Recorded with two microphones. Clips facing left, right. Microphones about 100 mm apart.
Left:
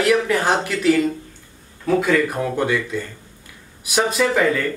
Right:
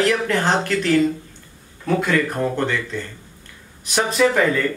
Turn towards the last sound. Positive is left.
turn(degrees=0)  # may be behind; listen again after turning